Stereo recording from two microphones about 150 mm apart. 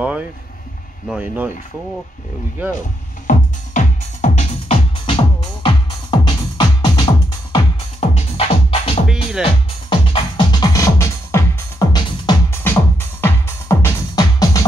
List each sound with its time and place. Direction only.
0.0 s speech: 10° right (ahead or behind)
3.3 s music: 55° left (ahead or behind)
5.0 s music: 35° left (ahead or behind)
8.0 s music: 40° left (ahead or behind)
9.0 s music: 5° right (ahead or behind)
9.4 s music: 35° left (ahead or behind)